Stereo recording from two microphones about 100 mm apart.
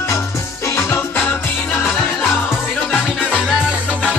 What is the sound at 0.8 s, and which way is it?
Music, 20° left (ahead or behind).